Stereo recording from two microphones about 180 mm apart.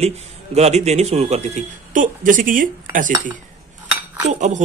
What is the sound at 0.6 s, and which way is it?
Speech, 40° right (ahead or behind).